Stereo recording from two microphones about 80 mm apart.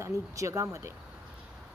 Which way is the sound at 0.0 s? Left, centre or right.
Right.